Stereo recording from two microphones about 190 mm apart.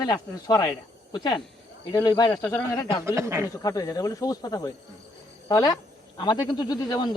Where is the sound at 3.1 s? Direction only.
15° right (ahead or behind).